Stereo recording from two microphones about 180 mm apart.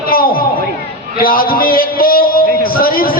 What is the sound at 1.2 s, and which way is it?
A man's voice, 55° left (ahead or behind).